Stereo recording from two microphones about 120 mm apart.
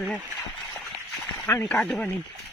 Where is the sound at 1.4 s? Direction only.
20° left (ahead or behind).